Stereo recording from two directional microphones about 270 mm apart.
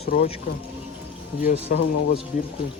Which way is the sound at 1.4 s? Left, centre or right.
Left.